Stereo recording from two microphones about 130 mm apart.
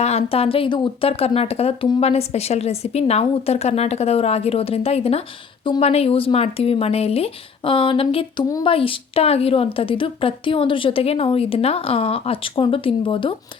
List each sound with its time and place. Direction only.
0.0 s a woman's voice: 55° left (ahead or behind)